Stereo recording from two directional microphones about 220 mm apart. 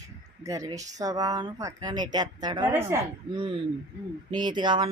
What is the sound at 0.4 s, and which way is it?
Speech, 15° right (ahead or behind).